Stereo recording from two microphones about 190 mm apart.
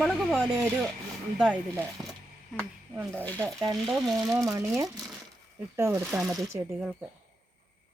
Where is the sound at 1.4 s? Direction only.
10° right (ahead or behind).